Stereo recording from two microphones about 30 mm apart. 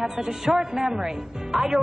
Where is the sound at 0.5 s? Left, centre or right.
Right.